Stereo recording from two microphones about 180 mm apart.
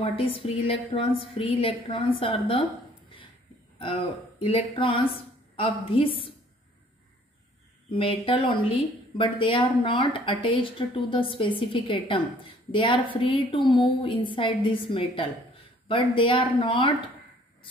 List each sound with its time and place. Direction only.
0.0 s speech: 30° left (ahead or behind)
3.8 s speech: 30° left (ahead or behind)
7.9 s speech: 30° left (ahead or behind)